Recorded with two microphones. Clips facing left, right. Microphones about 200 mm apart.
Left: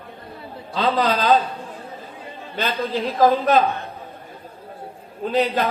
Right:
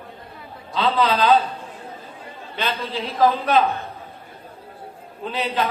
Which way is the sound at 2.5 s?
45° left (ahead or behind).